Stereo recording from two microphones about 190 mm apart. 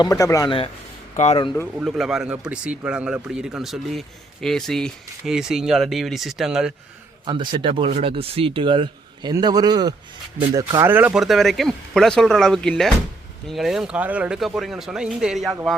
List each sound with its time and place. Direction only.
0.0 s speech: 15° left (ahead or behind)
1.8 s speech: centre (ahead or behind)
7.3 s speech: 25° right (ahead or behind); by 15.5 s centre (ahead or behind)